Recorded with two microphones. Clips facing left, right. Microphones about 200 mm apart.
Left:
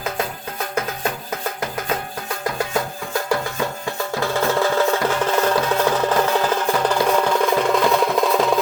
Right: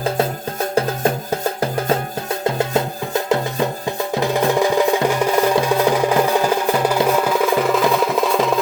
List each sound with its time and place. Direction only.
0.0 s music: 30° right (ahead or behind)
4.2 s percussion: 15° right (ahead or behind)
7.1 s music: 5° right (ahead or behind)